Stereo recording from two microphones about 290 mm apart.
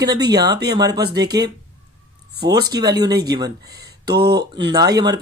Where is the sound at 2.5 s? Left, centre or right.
Centre.